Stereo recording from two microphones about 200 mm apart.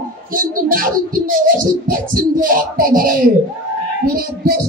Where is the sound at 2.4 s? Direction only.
45° right (ahead or behind).